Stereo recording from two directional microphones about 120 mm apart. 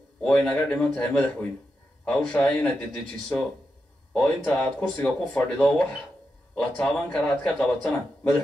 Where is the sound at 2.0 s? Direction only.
5° left (ahead or behind).